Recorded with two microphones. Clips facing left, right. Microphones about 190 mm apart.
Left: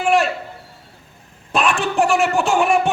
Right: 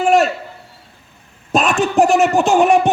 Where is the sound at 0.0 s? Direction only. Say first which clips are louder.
Right 4 dB; 40° right (ahead or behind).